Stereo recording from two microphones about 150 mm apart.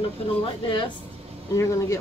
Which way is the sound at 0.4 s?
35° left (ahead or behind).